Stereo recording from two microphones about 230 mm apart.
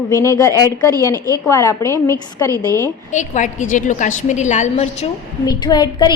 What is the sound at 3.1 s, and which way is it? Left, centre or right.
A woman's voice, left.